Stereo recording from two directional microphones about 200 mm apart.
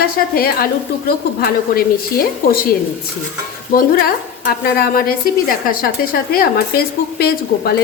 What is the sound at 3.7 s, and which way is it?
A woman's voice, 45° left (ahead or behind).